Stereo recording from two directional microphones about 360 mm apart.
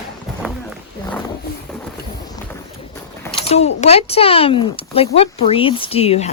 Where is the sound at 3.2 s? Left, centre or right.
Centre.